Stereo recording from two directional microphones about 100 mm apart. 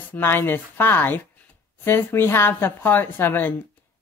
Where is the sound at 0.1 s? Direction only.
25° left (ahead or behind).